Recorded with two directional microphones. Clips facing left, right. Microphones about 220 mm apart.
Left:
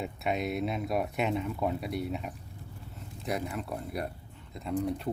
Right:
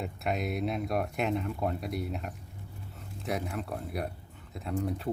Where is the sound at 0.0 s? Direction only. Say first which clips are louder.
Left 1 dB; centre (ahead or behind).